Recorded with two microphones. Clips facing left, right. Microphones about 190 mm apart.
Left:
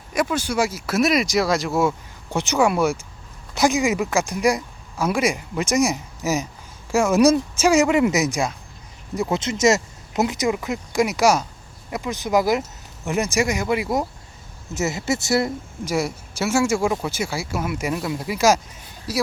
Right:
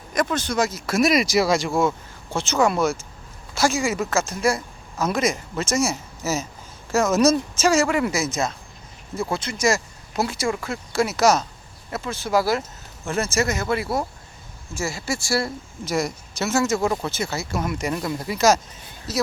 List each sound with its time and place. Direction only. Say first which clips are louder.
0.1 s speech: left 1 dB; 10° left (ahead or behind)
2.3 s speech: left 1 dB; 15° left (ahead or behind)